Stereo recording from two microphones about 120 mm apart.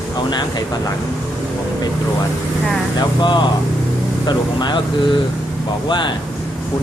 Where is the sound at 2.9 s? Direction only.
40° left (ahead or behind).